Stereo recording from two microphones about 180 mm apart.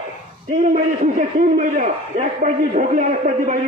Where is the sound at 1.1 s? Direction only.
45° right (ahead or behind).